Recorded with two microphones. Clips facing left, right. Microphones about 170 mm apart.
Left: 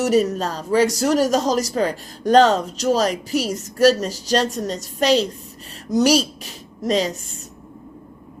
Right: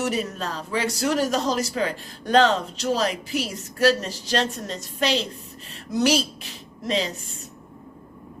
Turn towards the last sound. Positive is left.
turn(degrees=45)  # may be behind; listen again after turning